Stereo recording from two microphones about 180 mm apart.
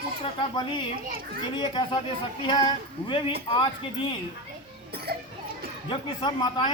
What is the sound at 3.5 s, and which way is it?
Speech, 30° left (ahead or behind).